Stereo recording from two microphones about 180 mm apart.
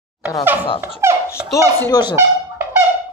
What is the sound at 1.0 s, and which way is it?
Baby laughter, 15° right (ahead or behind).